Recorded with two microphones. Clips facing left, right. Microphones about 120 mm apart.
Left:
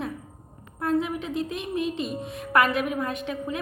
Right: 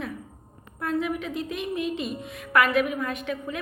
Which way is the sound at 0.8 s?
30° left (ahead or behind).